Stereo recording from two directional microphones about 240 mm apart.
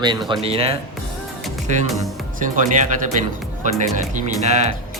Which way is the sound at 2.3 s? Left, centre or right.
Right.